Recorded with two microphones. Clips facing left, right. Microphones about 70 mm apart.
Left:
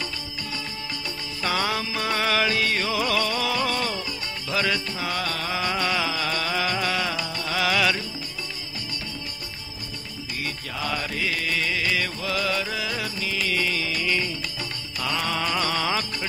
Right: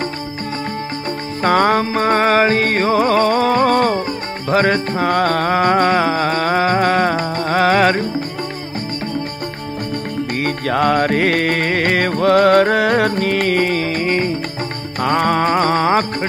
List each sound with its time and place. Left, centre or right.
1.4 s music: right
10.4 s music: right